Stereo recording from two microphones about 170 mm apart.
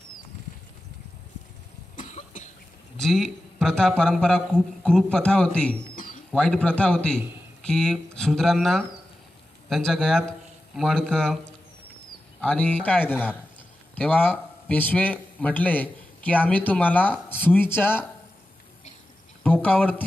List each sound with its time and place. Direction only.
2.0 s cough: 50° left (ahead or behind)
3.0 s a man's voice: centre (ahead or behind)
19.4 s speech: 10° left (ahead or behind)